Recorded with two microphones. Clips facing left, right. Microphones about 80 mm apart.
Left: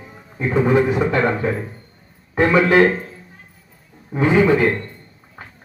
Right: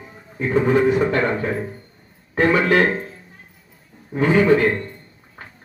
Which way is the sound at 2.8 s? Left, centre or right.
Centre.